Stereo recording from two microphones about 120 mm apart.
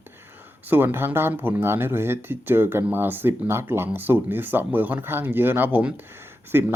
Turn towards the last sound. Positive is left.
turn(degrees=-20)  # may be behind; listen again after turning